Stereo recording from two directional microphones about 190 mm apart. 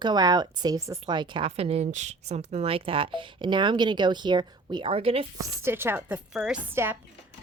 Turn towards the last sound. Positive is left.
turn(degrees=-10)  # may be behind; listen again after turning